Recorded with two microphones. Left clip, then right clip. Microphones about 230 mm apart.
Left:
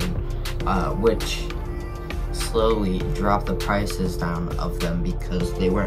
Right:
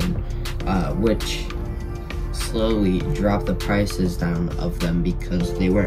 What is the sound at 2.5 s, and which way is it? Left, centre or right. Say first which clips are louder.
Speech: left 1 dB; centre.